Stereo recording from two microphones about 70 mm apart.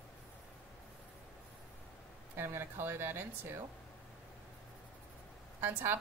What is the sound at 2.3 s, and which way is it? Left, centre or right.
A woman's voice, right.